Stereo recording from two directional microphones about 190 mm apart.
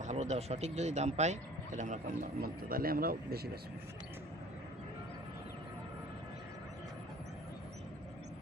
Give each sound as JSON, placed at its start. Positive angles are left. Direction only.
{"t": 0.0, "sound": "speech", "side_deg": -40}
{"t": 2.4, "sound": "speech", "side_deg": -50}